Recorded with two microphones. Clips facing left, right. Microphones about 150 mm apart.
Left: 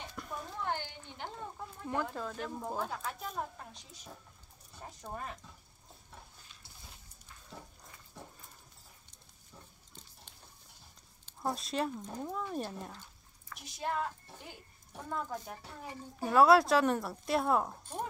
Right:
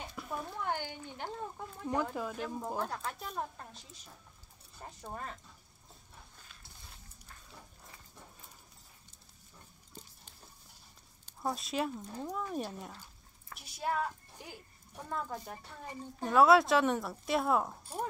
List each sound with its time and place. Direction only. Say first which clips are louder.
0.1 s a sound: right 2 dB; 5° right (ahead or behind)
2.0 s speech: right 1 dB; 10° right (ahead or behind)
5.0 s speech: left 1 dB; 5° left (ahead or behind)
11.4 s a woman's voice: even; centre (ahead or behind)